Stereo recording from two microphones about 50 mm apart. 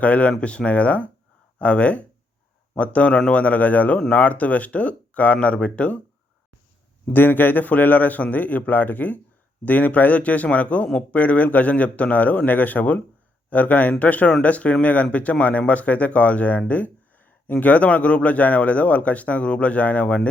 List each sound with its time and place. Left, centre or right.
0.0 s speech: left
7.0 s a man's voice: left